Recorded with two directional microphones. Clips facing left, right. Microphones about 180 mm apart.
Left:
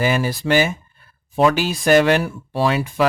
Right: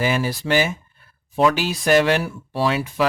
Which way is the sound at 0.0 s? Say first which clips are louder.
Left 2 dB; 50° left (ahead or behind).